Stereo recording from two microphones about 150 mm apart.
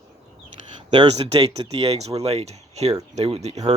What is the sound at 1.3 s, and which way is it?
Speech, 35° right (ahead or behind).